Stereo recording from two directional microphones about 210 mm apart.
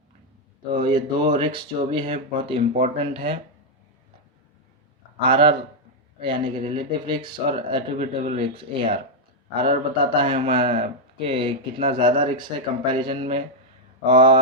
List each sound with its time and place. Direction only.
0.7 s speech: 25° right (ahead or behind)
5.2 s speech: 25° right (ahead or behind)